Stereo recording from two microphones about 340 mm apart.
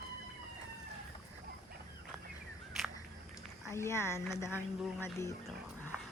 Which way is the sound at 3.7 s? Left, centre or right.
Centre.